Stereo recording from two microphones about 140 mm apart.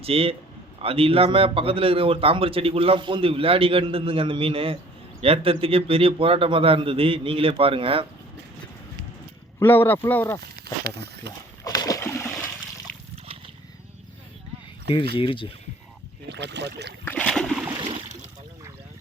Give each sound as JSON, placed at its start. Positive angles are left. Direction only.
{"t": 0.0, "sound": "a man's voice", "side_deg": -45}
{"t": 9.6, "sound": "speech", "side_deg": 15}
{"t": 11.6, "sound": "splash", "side_deg": 25}
{"t": 14.9, "sound": "speech", "side_deg": 35}
{"t": 17.1, "sound": "a sound", "side_deg": 10}
{"t": 17.7, "sound": "a sound", "side_deg": -40}